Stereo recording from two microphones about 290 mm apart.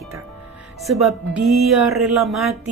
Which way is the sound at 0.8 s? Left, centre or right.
Centre.